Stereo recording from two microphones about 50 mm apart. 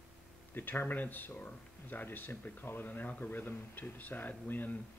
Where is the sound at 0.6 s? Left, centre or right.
Left.